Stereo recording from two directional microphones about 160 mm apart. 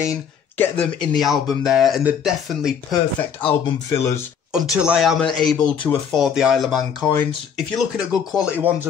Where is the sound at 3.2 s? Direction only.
10° left (ahead or behind).